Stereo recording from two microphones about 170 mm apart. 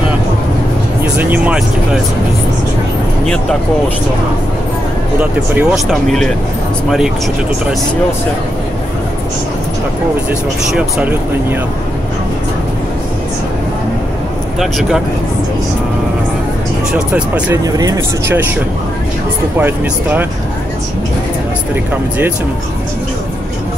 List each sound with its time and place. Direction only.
1.1 s speech: 10° right (ahead or behind)
5.6 s speech: 5° right (ahead or behind)
10.7 s speech: 5° right (ahead or behind)
14.6 s speech: centre (ahead or behind)
17.6 s speech: 20° right (ahead or behind)
19.6 s speech: 10° right (ahead or behind)